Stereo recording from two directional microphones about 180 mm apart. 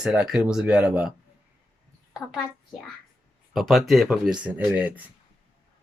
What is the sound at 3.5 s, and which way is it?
Speech, centre (ahead or behind).